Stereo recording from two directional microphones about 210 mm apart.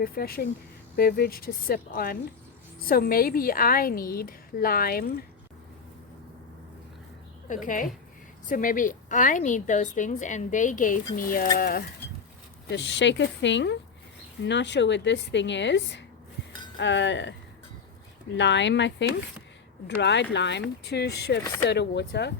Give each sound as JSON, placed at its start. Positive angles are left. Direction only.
{"t": 0.0, "sound": "a woman's voice", "side_deg": 45}
{"t": 7.4, "sound": "a woman's voice", "side_deg": 40}
{"t": 12.7, "sound": "speech", "side_deg": 55}
{"t": 18.3, "sound": "a woman's voice", "side_deg": 60}